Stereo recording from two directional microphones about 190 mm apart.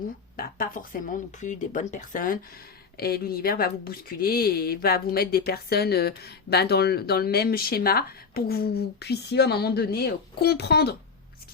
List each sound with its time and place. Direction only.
0.3 s speech: 50° left (ahead or behind)